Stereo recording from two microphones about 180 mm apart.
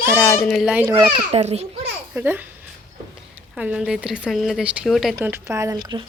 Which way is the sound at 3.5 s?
5° right (ahead or behind).